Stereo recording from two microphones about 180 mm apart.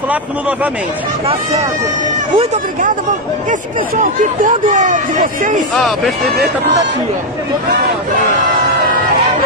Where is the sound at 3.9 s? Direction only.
45° right (ahead or behind).